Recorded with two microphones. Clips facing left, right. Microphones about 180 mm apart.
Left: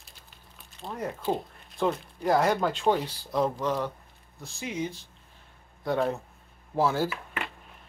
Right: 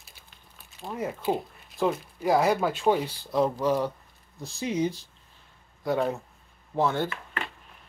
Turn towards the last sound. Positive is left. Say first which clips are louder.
# left 1 dB
turn(degrees=5)  # may be behind; listen again after turning